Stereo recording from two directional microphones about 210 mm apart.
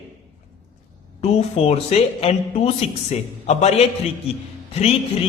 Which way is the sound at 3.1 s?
30° left (ahead or behind).